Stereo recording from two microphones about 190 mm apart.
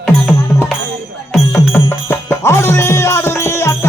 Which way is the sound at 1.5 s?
10° left (ahead or behind).